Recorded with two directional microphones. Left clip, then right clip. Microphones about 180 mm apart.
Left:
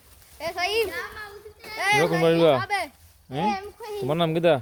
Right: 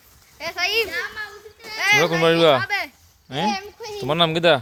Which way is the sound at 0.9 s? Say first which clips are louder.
Right 5 dB; 70° left (ahead or behind).